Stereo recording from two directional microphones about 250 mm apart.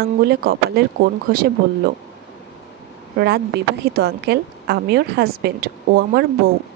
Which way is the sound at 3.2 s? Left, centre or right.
Right.